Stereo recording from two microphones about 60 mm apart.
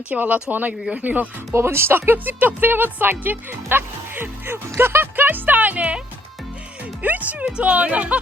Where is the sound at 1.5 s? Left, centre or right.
Right.